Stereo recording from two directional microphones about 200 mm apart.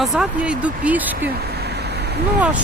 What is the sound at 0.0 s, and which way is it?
Speech, centre (ahead or behind).